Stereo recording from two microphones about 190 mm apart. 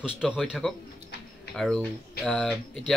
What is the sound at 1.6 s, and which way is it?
A man's voice, 5° left (ahead or behind).